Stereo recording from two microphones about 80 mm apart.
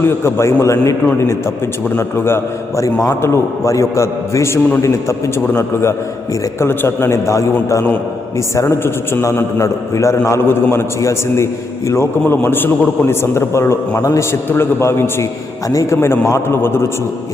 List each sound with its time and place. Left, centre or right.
0.0 s a man's voice: left
2.0 s a man's voice: left